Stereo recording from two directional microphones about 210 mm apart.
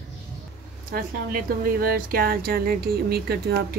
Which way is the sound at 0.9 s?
45° right (ahead or behind).